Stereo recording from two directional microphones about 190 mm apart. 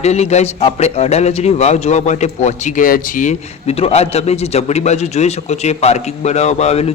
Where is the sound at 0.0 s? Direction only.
35° left (ahead or behind).